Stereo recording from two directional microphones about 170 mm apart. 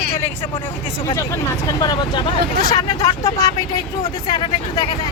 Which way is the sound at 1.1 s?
20° left (ahead or behind).